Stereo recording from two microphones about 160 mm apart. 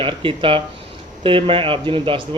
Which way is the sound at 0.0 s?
35° right (ahead or behind).